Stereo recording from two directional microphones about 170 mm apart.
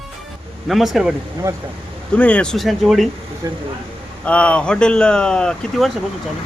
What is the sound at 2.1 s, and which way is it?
Speech, 5° left (ahead or behind).